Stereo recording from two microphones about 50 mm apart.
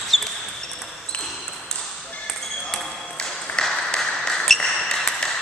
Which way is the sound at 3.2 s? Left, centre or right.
Centre.